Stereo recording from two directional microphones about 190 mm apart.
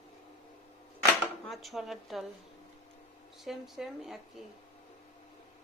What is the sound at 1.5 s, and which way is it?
Speech, centre (ahead or behind).